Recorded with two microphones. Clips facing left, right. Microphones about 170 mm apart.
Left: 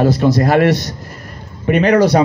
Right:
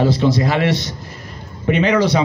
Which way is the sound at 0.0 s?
50° left (ahead or behind).